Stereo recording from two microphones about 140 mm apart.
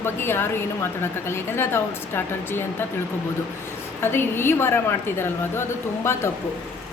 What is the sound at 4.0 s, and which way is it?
Speech, 15° left (ahead or behind).